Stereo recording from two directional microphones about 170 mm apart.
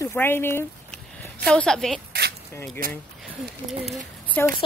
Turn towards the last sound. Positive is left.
turn(degrees=10)  # may be behind; listen again after turning